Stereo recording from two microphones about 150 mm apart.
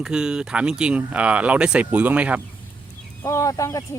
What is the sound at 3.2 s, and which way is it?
Speech, 20° left (ahead or behind).